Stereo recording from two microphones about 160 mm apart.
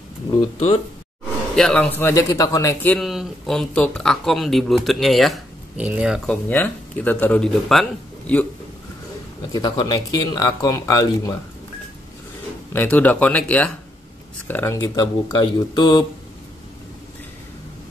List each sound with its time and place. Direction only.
1.5 s speech: 5° left (ahead or behind)
3.0 s speech: centre (ahead or behind)
6.2 s speech: 10° left (ahead or behind)
9.5 s speech: 25° left (ahead or behind)
12.7 s speech: 10° left (ahead or behind)
14.8 s speech: 25° left (ahead or behind)